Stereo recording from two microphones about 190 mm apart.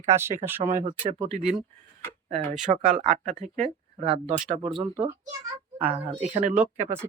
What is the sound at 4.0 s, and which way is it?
Speech, 30° right (ahead or behind).